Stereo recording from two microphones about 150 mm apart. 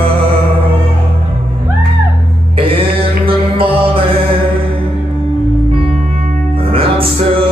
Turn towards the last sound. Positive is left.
turn(degrees=-40)  # may be behind; listen again after turning